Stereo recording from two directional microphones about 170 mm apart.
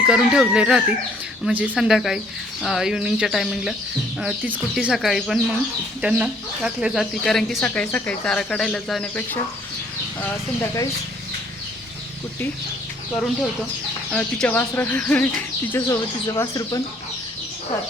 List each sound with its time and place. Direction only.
0.0 s speech: 5° right (ahead or behind)
14.1 s speech: 5° left (ahead or behind)
16.2 s speech: 20° left (ahead or behind)